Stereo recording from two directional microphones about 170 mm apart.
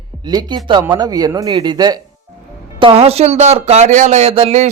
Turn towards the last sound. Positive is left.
turn(degrees=-40)  # may be behind; listen again after turning